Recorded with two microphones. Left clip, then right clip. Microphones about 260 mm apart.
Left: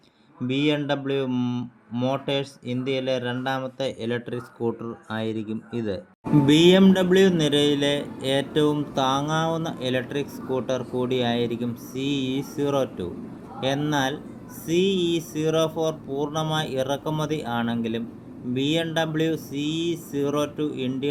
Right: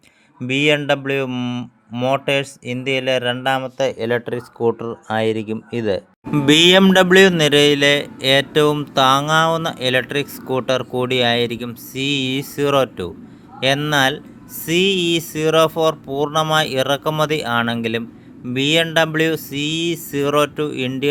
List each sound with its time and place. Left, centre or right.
0.8 s speech: right
3.9 s speech: right
6.4 s speech: right